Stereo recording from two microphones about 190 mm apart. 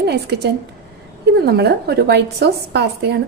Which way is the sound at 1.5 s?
60° right (ahead or behind).